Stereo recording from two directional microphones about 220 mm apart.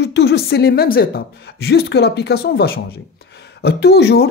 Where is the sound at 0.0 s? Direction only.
50° left (ahead or behind).